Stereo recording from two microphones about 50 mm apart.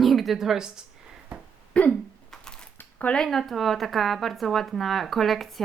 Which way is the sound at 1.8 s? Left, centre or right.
Left.